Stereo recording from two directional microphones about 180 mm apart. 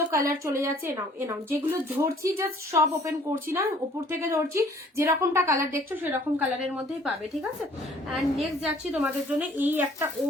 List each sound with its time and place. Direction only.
0.1 s a woman's voice: 15° right (ahead or behind)
8.1 s a woman's voice: 5° right (ahead or behind)